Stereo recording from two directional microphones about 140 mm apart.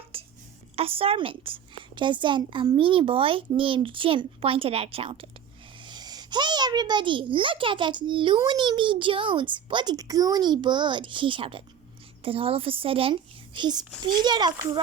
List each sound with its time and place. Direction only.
0.1 s a sound: 40° right (ahead or behind)
0.8 s a woman's voice: 40° right (ahead or behind)
5.8 s a child's voice: 30° right (ahead or behind)